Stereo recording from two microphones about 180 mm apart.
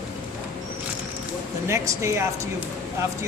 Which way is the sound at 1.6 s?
15° right (ahead or behind).